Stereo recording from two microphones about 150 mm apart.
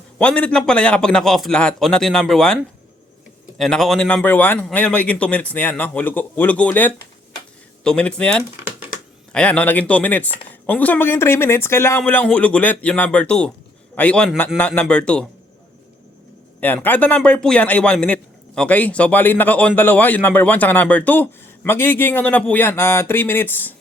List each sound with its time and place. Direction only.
0.2 s a man's voice: 10° left (ahead or behind)
3.6 s a man's voice: centre (ahead or behind)
16.6 s a man's voice: 10° left (ahead or behind)